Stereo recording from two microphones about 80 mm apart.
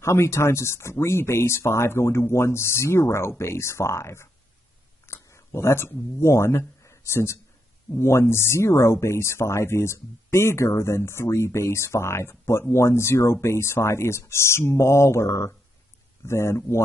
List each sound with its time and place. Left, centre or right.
0.0 s speech: left
6.8 s a sound: left
8.0 s speech: left